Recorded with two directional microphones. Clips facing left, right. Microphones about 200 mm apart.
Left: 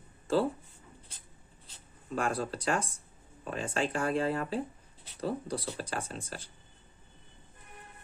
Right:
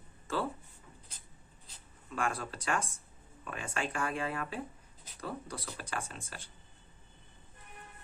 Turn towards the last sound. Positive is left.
turn(degrees=35)  # may be behind; listen again after turning